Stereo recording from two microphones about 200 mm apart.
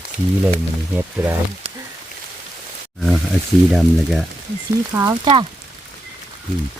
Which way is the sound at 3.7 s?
Centre (ahead or behind).